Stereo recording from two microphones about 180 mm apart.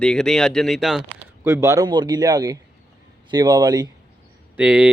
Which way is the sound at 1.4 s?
15° right (ahead or behind).